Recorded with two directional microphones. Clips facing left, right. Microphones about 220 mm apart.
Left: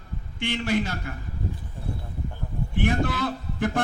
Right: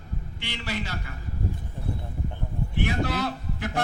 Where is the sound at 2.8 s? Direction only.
50° left (ahead or behind).